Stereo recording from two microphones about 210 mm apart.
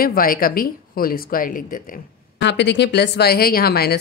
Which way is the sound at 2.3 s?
55° left (ahead or behind).